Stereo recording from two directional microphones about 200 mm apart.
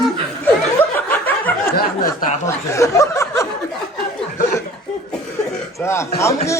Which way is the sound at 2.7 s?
15° left (ahead or behind).